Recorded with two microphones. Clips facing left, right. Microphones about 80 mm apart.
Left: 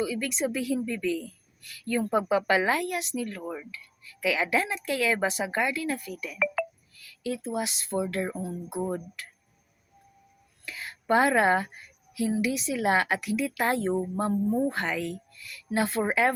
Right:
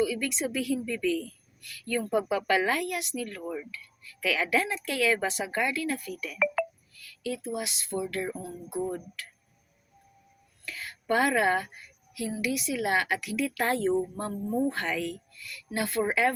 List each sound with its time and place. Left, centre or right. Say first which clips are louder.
0.0 s a woman's voice: even; left
10.7 s a woman's voice: left 3 dB; left